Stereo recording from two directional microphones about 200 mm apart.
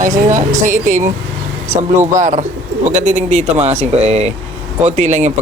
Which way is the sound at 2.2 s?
40° right (ahead or behind).